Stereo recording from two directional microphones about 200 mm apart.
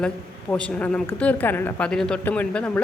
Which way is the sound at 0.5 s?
5° left (ahead or behind).